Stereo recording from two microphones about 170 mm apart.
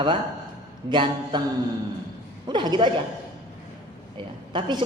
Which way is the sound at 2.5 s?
25° right (ahead or behind).